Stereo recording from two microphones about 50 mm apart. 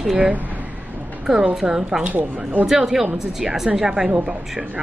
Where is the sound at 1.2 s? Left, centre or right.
Centre.